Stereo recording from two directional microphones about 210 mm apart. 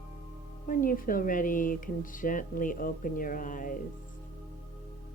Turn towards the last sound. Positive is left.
turn(degrees=40)  # may be behind; listen again after turning